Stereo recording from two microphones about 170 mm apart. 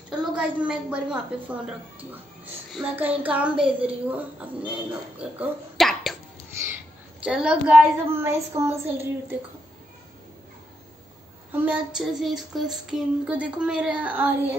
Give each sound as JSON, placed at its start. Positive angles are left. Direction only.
{"t": 0.2, "sound": "a woman's voice", "side_deg": -5}
{"t": 2.7, "sound": "child singing", "side_deg": -5}
{"t": 5.2, "sound": "speech", "side_deg": -5}
{"t": 6.5, "sound": "speech", "side_deg": -15}
{"t": 7.2, "sound": "child singing", "side_deg": -5}
{"t": 11.5, "sound": "child singing", "side_deg": -10}